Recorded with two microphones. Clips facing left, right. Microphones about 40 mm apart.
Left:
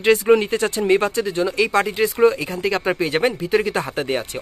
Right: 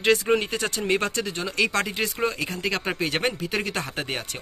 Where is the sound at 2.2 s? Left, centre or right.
Centre.